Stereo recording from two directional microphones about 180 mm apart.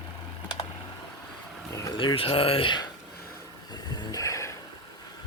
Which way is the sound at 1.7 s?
20° left (ahead or behind).